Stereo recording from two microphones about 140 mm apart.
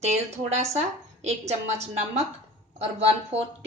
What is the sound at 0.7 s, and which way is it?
A woman's voice, 50° right (ahead or behind).